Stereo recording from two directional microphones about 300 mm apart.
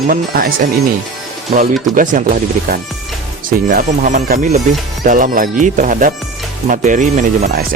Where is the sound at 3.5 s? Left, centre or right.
Right.